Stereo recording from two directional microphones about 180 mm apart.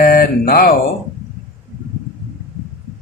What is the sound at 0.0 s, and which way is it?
Mantra, 55° left (ahead or behind).